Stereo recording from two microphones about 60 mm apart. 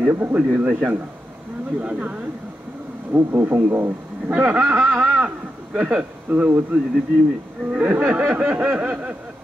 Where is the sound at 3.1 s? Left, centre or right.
Right.